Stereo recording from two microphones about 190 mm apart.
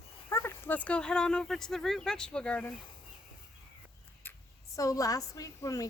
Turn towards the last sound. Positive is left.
turn(degrees=15)  # may be behind; listen again after turning